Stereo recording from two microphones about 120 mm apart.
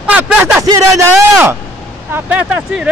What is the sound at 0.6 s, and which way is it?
Speech, 30° right (ahead or behind).